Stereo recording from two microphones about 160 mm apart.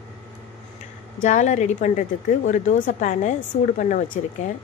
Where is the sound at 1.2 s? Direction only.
50° left (ahead or behind).